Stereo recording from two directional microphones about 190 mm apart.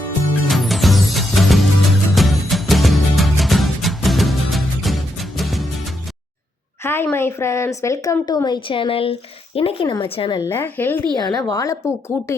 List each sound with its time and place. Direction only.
0.4 s music: centre (ahead or behind)
6.8 s a woman's voice: 10° left (ahead or behind)
10.5 s a woman's voice: 10° left (ahead or behind)
11.2 s a woman's voice: 20° left (ahead or behind)